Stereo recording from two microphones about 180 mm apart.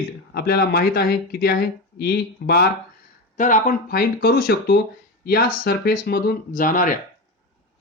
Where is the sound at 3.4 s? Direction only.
45° left (ahead or behind).